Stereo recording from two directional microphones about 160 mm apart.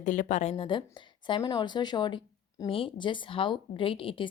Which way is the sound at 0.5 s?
30° left (ahead or behind).